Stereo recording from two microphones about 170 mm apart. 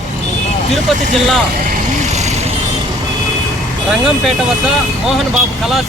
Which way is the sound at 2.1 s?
40° right (ahead or behind).